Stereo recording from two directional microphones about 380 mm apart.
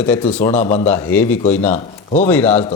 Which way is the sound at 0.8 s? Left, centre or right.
Centre.